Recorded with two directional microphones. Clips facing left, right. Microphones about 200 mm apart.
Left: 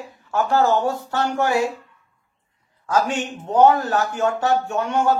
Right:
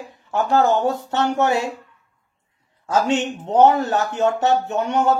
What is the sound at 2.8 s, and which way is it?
Speech, 25° right (ahead or behind).